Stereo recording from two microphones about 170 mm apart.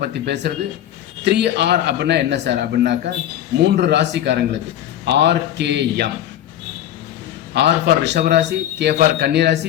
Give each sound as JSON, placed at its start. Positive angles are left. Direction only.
{"t": 0.0, "sound": "a man's voice", "side_deg": -75}
{"t": 7.5, "sound": "a man's voice", "side_deg": -90}